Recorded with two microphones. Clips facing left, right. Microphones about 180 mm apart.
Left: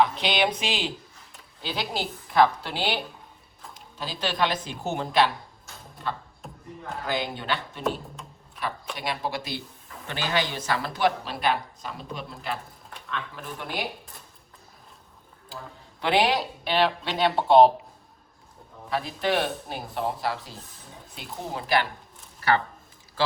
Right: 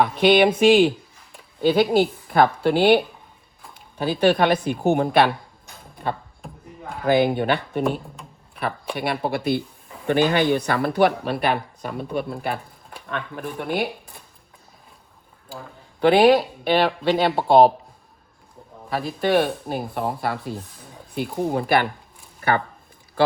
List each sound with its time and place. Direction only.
0.0 s speech: 55° right (ahead or behind)
7.0 s speech: 60° right (ahead or behind)
16.0 s speech: 50° right (ahead or behind)
19.3 s speech: 50° right (ahead or behind)